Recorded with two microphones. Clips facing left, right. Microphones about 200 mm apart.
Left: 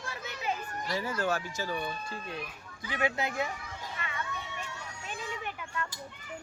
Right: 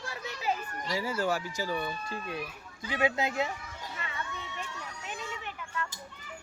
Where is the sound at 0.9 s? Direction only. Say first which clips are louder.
Right 1 dB; 10° right (ahead or behind).